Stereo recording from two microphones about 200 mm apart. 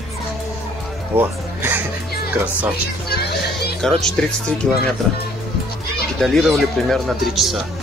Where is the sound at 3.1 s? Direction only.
50° left (ahead or behind).